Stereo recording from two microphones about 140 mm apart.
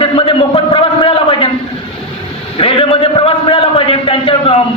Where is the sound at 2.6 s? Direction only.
40° left (ahead or behind).